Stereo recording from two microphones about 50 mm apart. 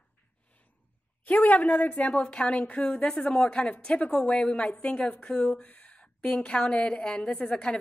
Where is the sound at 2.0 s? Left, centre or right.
Centre.